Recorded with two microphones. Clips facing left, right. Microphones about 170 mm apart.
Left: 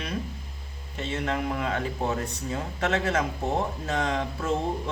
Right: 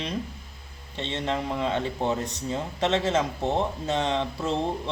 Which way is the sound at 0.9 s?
30° right (ahead or behind).